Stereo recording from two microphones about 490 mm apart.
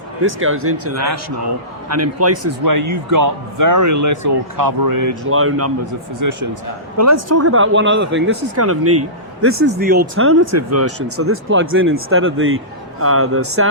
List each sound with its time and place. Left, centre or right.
0.3 s speech: right
5.3 s speech: right